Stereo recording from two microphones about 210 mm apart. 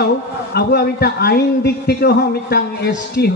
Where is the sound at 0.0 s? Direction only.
50° left (ahead or behind).